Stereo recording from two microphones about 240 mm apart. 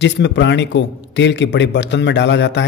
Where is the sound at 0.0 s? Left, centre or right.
Left.